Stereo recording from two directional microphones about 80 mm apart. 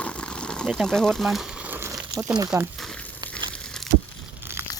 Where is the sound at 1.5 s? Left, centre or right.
Centre.